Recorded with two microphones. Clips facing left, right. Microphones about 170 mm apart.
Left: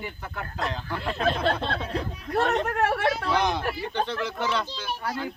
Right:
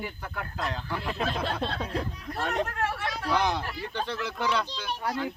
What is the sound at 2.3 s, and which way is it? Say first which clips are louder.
Speech: left 6 dB; 70° left (ahead or behind).